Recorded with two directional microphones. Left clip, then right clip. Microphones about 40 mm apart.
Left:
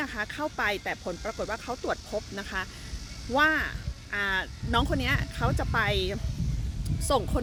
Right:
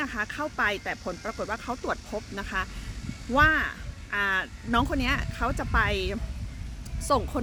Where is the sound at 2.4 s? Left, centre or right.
Right.